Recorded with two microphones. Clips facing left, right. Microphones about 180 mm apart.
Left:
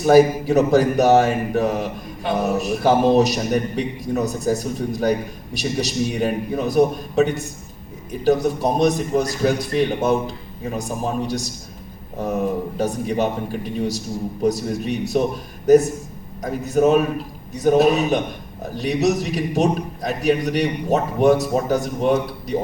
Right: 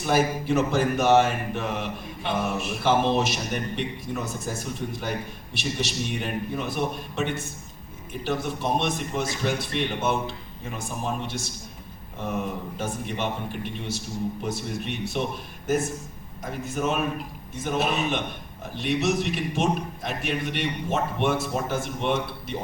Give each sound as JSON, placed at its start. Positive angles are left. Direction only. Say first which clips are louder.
{"t": 0.0, "sound": "speech", "louder": "left 10 dB", "side_deg": 40}